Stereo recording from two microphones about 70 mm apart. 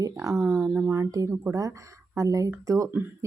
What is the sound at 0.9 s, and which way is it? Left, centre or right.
Speech, right.